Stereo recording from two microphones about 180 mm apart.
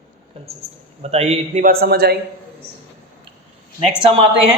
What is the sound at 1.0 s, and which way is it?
A man's voice, 35° right (ahead or behind).